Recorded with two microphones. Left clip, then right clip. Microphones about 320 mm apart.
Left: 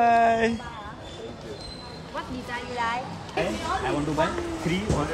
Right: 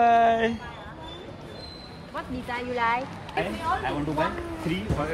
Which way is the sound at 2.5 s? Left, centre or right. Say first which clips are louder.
Right 3 dB; right.